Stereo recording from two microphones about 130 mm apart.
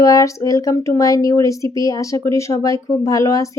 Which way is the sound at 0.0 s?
25° left (ahead or behind).